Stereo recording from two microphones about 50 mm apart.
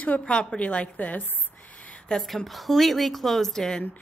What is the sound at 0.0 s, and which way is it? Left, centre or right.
Speech, left.